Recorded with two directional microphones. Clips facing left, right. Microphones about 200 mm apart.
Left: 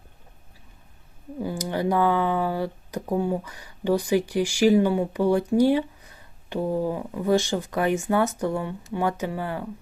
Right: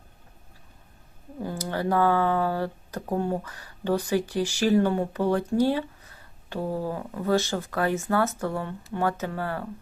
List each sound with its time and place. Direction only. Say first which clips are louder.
1.5 s speech: left 2 dB; 15° left (ahead or behind)